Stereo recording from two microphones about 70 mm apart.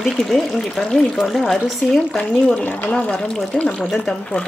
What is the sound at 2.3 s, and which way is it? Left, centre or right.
Speech, centre.